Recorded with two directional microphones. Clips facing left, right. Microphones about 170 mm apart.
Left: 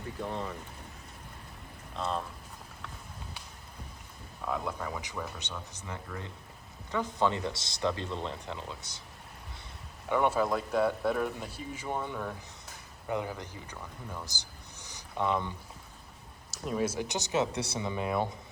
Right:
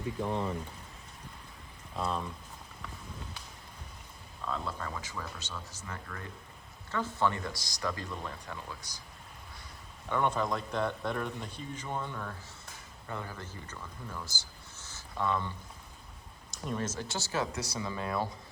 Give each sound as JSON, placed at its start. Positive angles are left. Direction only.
{"t": 4.4, "sound": "speech", "side_deg": 15}
{"t": 10.1, "sound": "speech", "side_deg": 10}
{"t": 16.5, "sound": "speech", "side_deg": 5}